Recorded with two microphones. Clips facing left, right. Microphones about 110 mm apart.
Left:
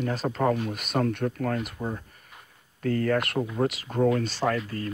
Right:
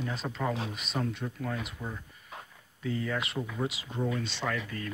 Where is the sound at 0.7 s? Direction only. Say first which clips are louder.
Left 7 dB; 60° left (ahead or behind); by 4.9 s 40° left (ahead or behind).